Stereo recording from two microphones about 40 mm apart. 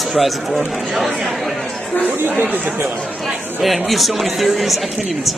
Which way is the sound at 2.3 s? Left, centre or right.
Right.